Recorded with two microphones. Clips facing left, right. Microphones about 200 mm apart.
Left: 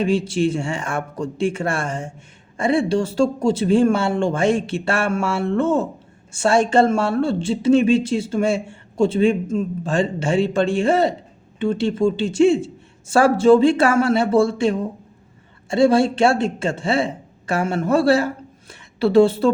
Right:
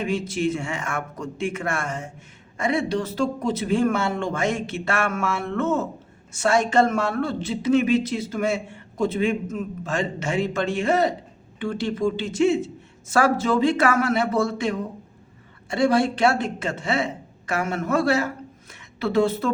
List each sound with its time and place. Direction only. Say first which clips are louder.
0.0 s a man's voice: left 5 dB; 30° left (ahead or behind)